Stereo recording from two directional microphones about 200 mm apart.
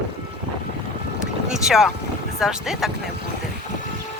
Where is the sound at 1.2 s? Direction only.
5° right (ahead or behind).